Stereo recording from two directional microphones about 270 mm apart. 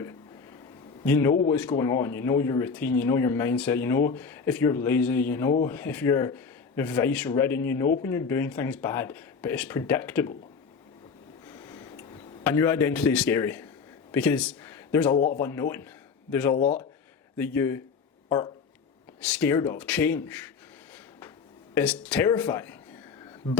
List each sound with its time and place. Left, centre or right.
1.0 s speech: centre
11.4 s a sound: centre
14.1 s speech: centre
21.8 s speech: centre